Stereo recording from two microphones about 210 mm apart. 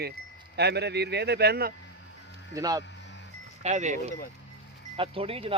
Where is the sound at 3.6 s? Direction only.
35° right (ahead or behind).